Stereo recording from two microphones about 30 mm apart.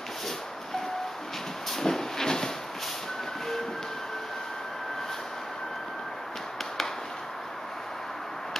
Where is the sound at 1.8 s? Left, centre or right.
Centre.